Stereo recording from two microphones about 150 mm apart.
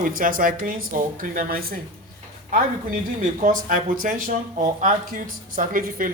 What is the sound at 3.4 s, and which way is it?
Speech, 60° right (ahead or behind).